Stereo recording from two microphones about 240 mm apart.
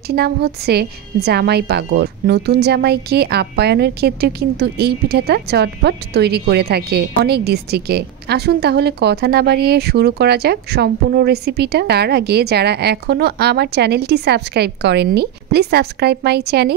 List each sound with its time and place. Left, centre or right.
0.1 s a woman's voice: right